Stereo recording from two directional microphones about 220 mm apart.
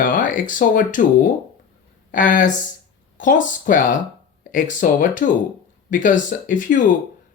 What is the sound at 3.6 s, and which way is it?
Speech, 35° left (ahead or behind).